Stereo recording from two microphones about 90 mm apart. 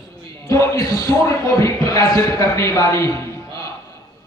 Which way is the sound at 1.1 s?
25° left (ahead or behind).